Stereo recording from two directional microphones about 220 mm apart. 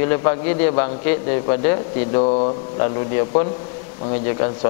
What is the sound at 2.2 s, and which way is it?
Speech, 30° left (ahead or behind).